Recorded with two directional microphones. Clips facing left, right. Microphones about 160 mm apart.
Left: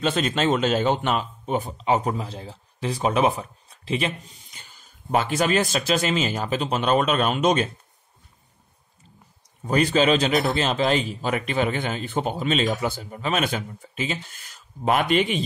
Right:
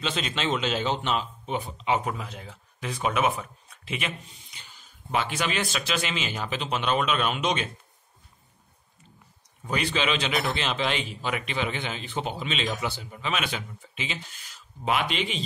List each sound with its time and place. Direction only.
0.0 s speech: 45° left (ahead or behind)
9.7 s a man's voice: 45° left (ahead or behind)